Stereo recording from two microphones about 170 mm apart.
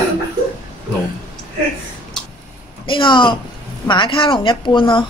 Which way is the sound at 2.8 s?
30° left (ahead or behind).